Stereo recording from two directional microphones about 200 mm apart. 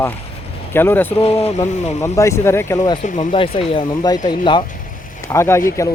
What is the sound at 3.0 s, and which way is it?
Speech, 40° left (ahead or behind).